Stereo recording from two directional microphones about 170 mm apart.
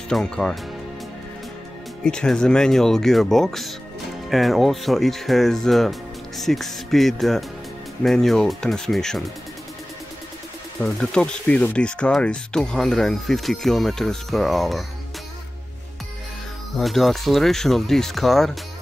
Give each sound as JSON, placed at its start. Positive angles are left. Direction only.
{"t": 0.1, "sound": "speech", "side_deg": 5}
{"t": 2.0, "sound": "speech", "side_deg": 5}
{"t": 10.8, "sound": "speech", "side_deg": 5}
{"t": 16.7, "sound": "speech", "side_deg": 0}